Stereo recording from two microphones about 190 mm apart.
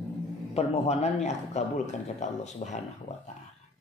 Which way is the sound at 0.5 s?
35° left (ahead or behind).